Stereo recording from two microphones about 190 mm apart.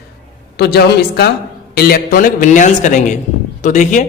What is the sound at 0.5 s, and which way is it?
A woman's voice, 60° left (ahead or behind).